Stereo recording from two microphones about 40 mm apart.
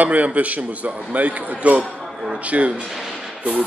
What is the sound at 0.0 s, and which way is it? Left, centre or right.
Speech, right.